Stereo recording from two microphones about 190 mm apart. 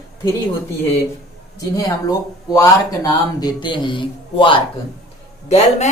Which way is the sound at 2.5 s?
20° left (ahead or behind).